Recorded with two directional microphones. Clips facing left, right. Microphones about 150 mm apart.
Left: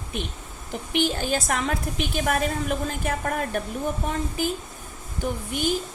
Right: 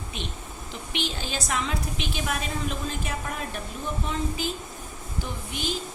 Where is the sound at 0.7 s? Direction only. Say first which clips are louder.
Left 8 dB; 50° left (ahead or behind).